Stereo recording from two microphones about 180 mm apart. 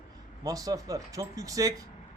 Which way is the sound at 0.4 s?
20° right (ahead or behind).